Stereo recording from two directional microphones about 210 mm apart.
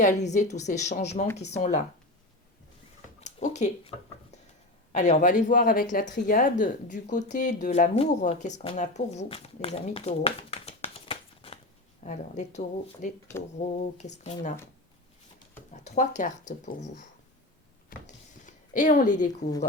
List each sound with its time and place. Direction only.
0.0 s speech: 35° left (ahead or behind)
3.2 s speech: 35° left (ahead or behind)
15.7 s speech: 35° left (ahead or behind)
17.8 s a sound: 40° left (ahead or behind)